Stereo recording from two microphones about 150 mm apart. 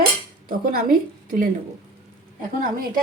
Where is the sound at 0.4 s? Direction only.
75° right (ahead or behind).